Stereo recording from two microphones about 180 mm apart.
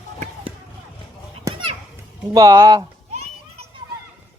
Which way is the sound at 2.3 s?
15° right (ahead or behind).